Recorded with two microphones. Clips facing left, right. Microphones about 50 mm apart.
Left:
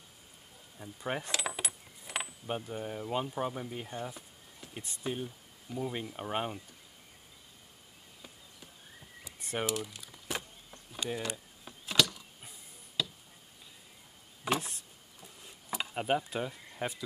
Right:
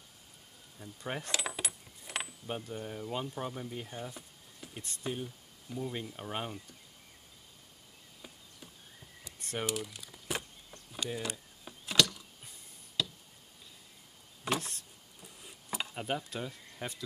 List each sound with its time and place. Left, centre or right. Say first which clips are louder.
0.7 s speech: left 3 dB; centre
9.2 s typing: left 2 dB; centre
9.7 s crumpling: left 1 dB; centre
10.9 s a sound: left 1 dB; centre
14.4 s a sound: left 2 dB; centre
15.9 s speech: left 7 dB; centre